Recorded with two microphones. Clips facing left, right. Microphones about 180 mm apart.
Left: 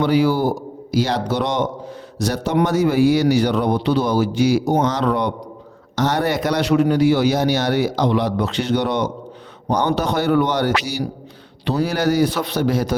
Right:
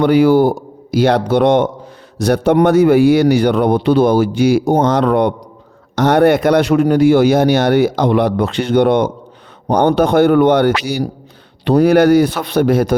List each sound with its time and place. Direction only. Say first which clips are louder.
0.0 s a man's voice: right 7 dB; 55° right (ahead or behind)